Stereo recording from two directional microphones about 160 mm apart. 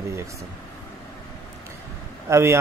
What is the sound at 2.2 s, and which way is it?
Speech, 15° right (ahead or behind).